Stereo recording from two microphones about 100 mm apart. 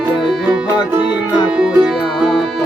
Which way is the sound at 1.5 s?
10° right (ahead or behind).